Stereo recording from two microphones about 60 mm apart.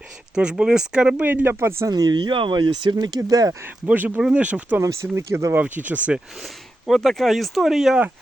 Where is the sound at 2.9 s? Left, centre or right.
Right.